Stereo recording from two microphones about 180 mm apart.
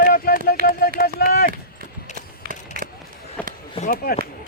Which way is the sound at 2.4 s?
50° right (ahead or behind).